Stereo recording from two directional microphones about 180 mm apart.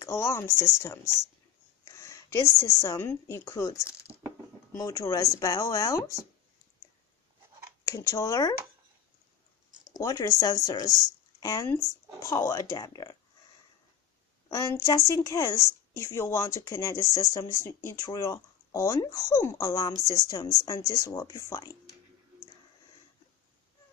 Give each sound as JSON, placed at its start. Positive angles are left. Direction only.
{"t": 0.0, "sound": "a woman's voice", "side_deg": 15}
{"t": 7.8, "sound": "speech", "side_deg": 15}
{"t": 9.7, "sound": "a sound", "side_deg": -25}
{"t": 9.9, "sound": "speech", "side_deg": 20}
{"t": 14.5, "sound": "speech", "side_deg": 20}